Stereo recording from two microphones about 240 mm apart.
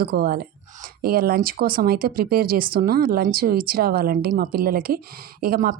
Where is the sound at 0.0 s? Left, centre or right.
Right.